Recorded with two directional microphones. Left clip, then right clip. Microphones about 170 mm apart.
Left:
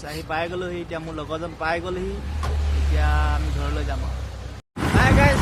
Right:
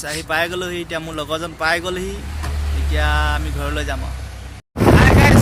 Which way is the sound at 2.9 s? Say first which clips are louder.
Right 7 dB; 25° right (ahead or behind).